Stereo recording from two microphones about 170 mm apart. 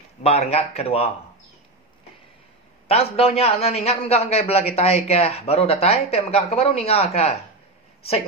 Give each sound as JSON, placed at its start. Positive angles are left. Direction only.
{"t": 0.2, "sound": "a man's voice", "side_deg": 35}
{"t": 2.9, "sound": "a man's voice", "side_deg": 35}